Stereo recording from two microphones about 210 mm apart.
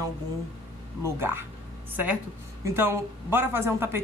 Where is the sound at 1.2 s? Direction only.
10° right (ahead or behind).